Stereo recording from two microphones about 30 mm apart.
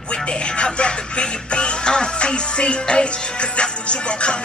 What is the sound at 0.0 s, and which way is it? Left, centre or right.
Music, left.